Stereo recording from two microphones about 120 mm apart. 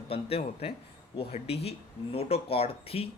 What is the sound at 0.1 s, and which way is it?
Speech, 55° left (ahead or behind).